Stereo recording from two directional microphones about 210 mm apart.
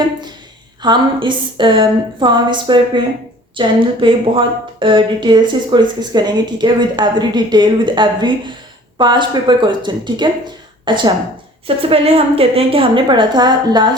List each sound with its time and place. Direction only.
0.8 s a woman's voice: 20° right (ahead or behind)